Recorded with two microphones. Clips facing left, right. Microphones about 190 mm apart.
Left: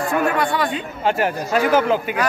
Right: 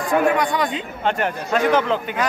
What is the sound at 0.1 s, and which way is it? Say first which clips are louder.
Speech: right 4 dB; 15° right (ahead or behind).